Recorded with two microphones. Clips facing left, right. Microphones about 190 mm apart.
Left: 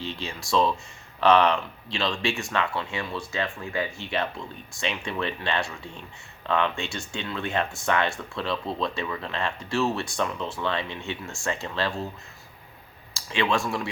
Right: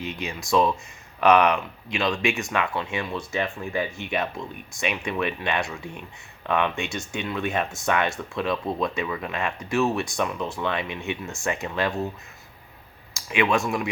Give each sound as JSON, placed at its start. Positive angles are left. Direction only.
{"t": 0.0, "sound": "speech", "side_deg": -15}
{"t": 13.1, "sound": "speech", "side_deg": -15}